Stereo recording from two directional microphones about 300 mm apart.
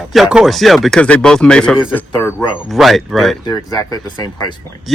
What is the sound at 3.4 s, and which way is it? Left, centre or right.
Speech, centre.